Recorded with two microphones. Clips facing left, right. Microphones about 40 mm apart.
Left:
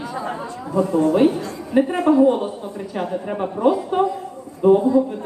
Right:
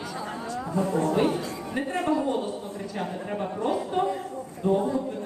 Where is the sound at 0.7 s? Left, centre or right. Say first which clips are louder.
Left 8 dB; left.